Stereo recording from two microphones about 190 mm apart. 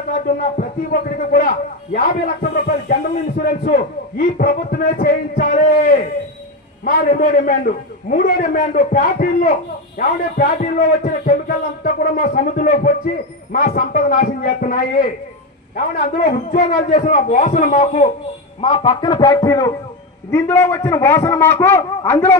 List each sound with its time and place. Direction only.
2.0 s a man's voice: 50° left (ahead or behind)
18.6 s a man's voice: 30° left (ahead or behind); by 22.4 s 10° left (ahead or behind)